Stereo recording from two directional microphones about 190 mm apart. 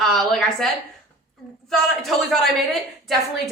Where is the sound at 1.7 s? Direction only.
Centre (ahead or behind).